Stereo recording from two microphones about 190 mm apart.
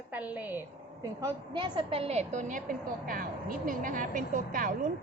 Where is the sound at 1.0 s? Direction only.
20° right (ahead or behind).